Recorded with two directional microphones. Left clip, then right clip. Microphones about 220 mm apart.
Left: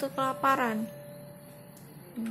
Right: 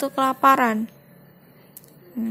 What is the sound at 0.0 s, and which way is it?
Speech, 40° right (ahead or behind).